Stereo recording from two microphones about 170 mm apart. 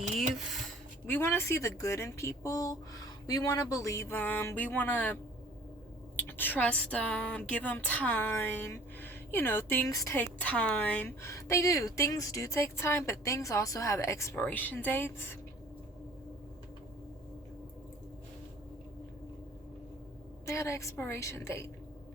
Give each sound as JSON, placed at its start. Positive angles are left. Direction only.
{"t": 1.0, "sound": "speech", "side_deg": 15}
{"t": 6.1, "sound": "speech", "side_deg": 10}
{"t": 20.4, "sound": "speech", "side_deg": 15}